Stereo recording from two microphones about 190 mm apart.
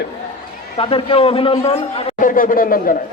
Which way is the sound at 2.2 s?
45° left (ahead or behind).